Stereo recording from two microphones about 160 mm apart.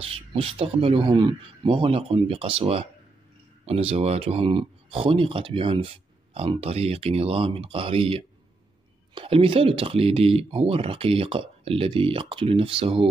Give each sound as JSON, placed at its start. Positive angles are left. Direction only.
{"t": 0.0, "sound": "speech", "side_deg": -35}